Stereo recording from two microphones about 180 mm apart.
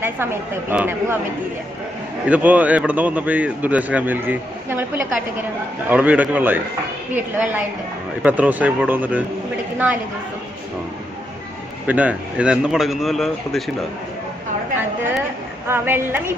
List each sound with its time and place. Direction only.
0.0 s a man's voice: 10° right (ahead or behind)
2.2 s a man's voice: 10° right (ahead or behind)
11.9 s speech: 10° right (ahead or behind)
15.6 s a man's voice: 10° right (ahead or behind)